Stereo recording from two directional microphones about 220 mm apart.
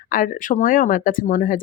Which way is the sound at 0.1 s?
35° left (ahead or behind).